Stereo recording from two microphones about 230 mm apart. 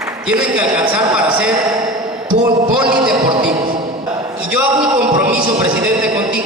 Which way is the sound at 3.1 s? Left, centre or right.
Right.